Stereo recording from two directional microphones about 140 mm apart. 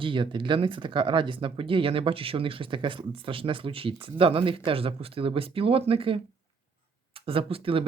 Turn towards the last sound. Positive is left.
turn(degrees=-40)  # may be behind; listen again after turning